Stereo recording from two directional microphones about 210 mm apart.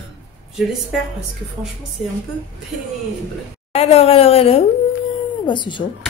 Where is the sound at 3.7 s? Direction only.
30° left (ahead or behind).